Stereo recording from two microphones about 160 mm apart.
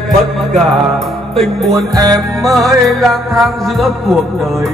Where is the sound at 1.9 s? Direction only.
25° right (ahead or behind).